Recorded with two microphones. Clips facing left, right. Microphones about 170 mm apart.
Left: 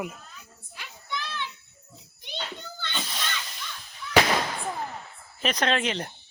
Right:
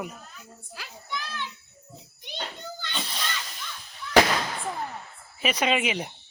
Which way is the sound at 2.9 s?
Centre (ahead or behind).